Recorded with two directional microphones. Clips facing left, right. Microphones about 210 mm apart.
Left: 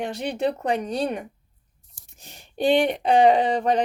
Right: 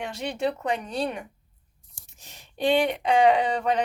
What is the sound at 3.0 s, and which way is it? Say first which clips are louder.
Speech: left 3 dB; 35° left (ahead or behind).